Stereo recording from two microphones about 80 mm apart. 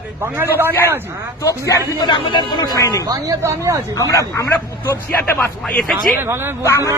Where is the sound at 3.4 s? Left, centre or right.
Right.